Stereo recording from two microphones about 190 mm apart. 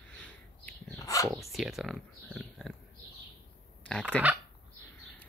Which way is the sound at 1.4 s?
Centre (ahead or behind).